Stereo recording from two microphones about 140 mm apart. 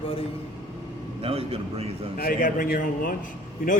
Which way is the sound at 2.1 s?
85° left.